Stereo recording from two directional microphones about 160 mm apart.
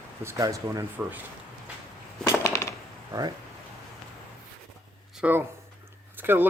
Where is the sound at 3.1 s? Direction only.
25° right (ahead or behind).